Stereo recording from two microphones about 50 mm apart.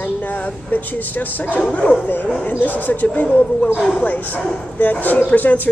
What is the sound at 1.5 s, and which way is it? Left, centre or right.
Speech, left.